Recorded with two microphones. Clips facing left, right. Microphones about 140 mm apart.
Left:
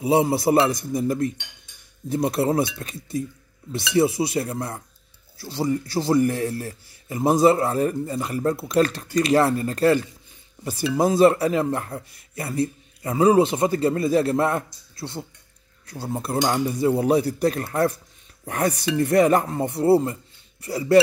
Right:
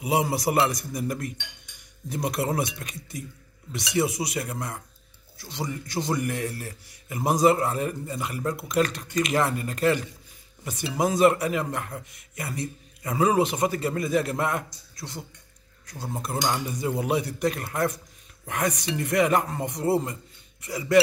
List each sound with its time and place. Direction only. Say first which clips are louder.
0.0 s a man's voice: left 6 dB; 30° left (ahead or behind)